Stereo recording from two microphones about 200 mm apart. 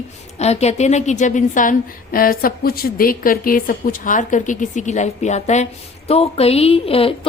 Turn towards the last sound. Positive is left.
turn(degrees=30)  # may be behind; listen again after turning